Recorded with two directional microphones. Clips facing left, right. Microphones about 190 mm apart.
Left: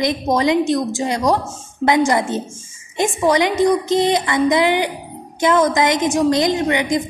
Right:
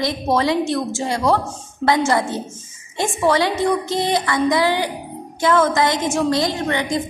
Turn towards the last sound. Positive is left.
turn(degrees=15)  # may be behind; listen again after turning